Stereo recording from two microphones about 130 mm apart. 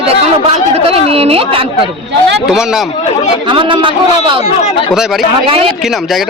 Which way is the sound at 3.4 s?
40° right (ahead or behind).